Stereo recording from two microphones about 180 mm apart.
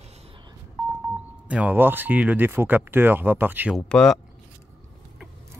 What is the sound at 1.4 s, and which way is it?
Speech, 10° right (ahead or behind).